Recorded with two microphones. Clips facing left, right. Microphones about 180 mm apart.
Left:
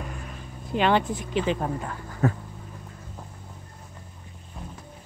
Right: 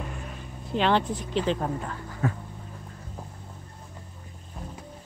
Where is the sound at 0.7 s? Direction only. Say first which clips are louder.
Left 1 dB; 5° left (ahead or behind).